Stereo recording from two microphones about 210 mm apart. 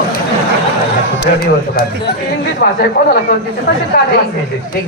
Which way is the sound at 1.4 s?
45° left (ahead or behind).